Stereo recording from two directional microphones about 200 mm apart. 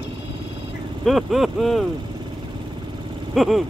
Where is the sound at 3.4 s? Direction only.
Centre (ahead or behind).